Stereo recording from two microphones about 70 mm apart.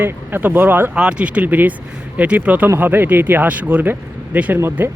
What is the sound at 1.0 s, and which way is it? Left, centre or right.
Speech, centre.